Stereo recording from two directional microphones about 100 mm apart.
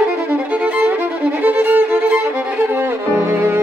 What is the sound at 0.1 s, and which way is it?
Violin, 15° right (ahead or behind).